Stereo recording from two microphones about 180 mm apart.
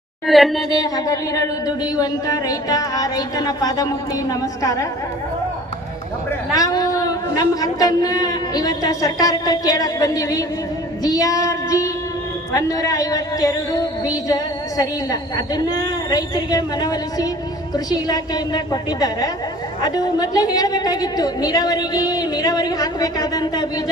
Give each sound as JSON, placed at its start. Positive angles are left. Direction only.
{"t": 0.3, "sound": "speech", "side_deg": 0}
{"t": 0.7, "sound": "a woman's voice", "side_deg": 20}
{"t": 6.5, "sound": "a woman's voice", "side_deg": 20}